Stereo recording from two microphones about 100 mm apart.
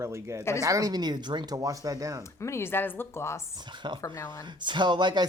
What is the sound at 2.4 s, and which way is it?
Speech, 25° left (ahead or behind).